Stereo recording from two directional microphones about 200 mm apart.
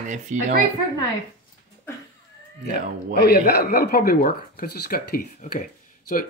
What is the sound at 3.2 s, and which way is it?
Speech, 50° left (ahead or behind).